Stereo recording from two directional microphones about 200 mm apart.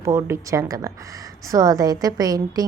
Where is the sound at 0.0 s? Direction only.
15° right (ahead or behind).